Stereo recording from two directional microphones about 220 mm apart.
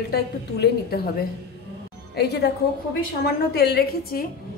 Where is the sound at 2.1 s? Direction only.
50° left (ahead or behind).